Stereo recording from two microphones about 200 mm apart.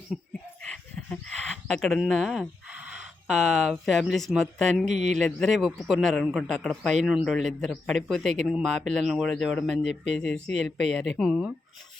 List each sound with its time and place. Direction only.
0.1 s a man's voice: centre (ahead or behind)
0.6 s a sound: 5° left (ahead or behind)
4.9 s speech: 35° right (ahead or behind)
5.1 s a man's voice: centre (ahead or behind)